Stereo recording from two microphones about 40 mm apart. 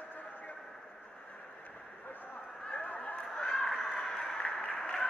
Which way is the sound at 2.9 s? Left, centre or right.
Left.